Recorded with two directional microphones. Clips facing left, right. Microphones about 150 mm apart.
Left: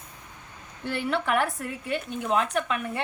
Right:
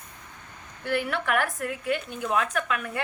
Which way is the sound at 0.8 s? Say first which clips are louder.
Even; 25° left (ahead or behind).